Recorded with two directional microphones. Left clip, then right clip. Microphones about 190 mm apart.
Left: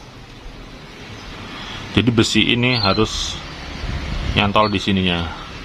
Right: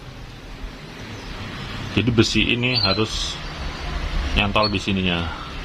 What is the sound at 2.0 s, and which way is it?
Speech, 20° left (ahead or behind).